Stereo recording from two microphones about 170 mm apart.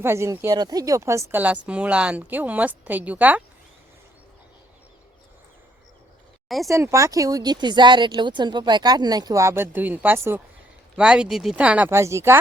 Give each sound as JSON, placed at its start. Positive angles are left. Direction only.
{"t": 0.0, "sound": "speech", "side_deg": -15}
{"t": 6.7, "sound": "speech", "side_deg": -15}